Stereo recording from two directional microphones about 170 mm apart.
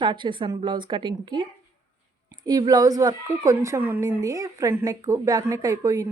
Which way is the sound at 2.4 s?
20° right (ahead or behind).